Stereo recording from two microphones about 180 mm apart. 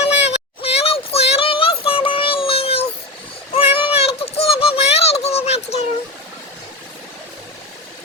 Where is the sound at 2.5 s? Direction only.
35° left (ahead or behind).